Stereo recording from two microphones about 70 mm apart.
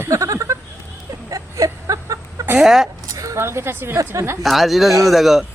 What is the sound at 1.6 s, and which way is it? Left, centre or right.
Chicken, right.